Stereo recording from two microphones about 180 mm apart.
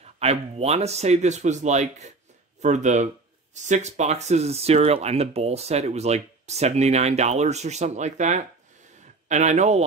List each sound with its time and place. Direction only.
0.0 s speech: 35° right (ahead or behind)